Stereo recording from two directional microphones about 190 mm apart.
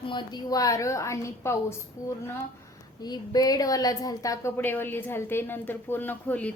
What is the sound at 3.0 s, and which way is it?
A woman's voice, 20° left (ahead or behind).